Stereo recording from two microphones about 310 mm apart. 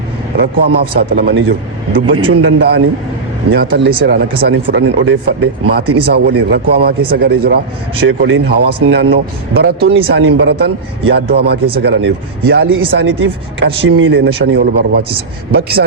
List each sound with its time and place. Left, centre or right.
0.3 s speech: right
5.8 s speech: right
6.1 s speech: right